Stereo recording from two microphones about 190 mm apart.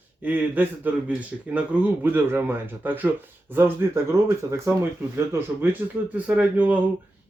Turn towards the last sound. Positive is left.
turn(degrees=-10)  # may be behind; listen again after turning